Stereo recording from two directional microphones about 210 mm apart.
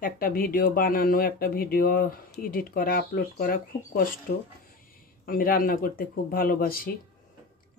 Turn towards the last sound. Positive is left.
turn(degrees=45)  # may be behind; listen again after turning